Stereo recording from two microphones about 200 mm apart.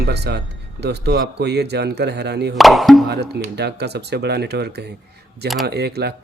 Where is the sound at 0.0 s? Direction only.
55° right (ahead or behind).